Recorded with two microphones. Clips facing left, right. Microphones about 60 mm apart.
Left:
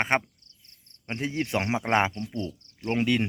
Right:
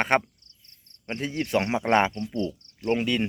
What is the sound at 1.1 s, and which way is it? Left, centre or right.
Speech, left.